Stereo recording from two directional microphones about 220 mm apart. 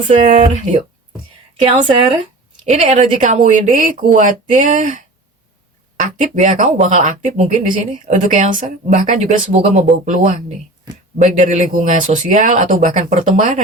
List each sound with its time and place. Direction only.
0.1 s speech: 35° right (ahead or behind)
11.2 s speech: 35° right (ahead or behind)